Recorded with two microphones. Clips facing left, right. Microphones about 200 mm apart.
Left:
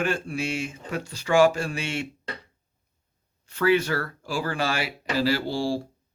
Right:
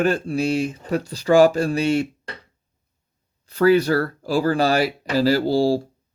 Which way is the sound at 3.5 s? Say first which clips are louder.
Right 6 dB; 35° right (ahead or behind).